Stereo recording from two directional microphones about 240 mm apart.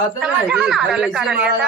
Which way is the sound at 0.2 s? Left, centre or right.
Centre.